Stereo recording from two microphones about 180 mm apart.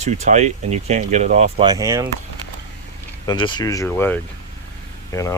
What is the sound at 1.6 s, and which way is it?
Speech, 20° right (ahead or behind).